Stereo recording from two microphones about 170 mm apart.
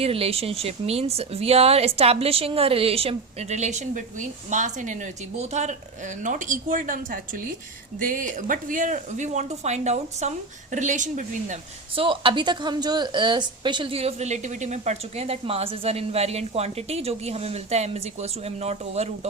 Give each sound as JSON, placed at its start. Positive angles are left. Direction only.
{"t": 0.0, "sound": "a woman's voice", "side_deg": -35}
{"t": 11.9, "sound": "a woman's voice", "side_deg": -30}